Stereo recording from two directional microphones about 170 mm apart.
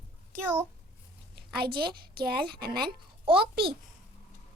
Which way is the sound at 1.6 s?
60° right (ahead or behind).